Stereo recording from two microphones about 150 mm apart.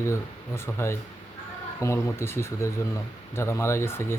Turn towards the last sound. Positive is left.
turn(degrees=15)  # may be behind; listen again after turning